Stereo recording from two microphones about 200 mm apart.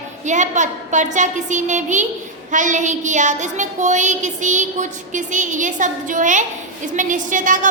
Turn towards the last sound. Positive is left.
turn(degrees=-40)  # may be behind; listen again after turning